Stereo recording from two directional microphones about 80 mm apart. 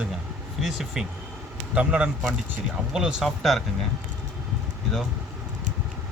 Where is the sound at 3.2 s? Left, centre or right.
Centre.